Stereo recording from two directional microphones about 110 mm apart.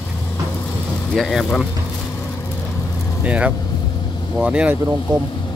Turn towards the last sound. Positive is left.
turn(degrees=-40)  # may be behind; listen again after turning